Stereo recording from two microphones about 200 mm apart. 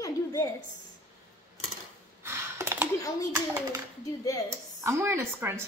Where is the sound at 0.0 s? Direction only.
15° left (ahead or behind).